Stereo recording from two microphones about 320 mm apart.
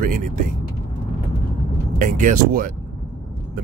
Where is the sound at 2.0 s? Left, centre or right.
Right.